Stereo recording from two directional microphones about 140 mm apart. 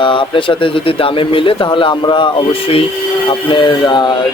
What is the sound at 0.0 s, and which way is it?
Speech, 35° left (ahead or behind).